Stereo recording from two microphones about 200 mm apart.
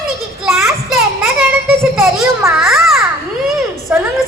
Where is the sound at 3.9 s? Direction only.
5° right (ahead or behind).